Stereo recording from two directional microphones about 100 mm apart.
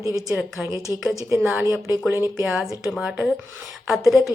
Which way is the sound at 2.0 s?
25° right (ahead or behind).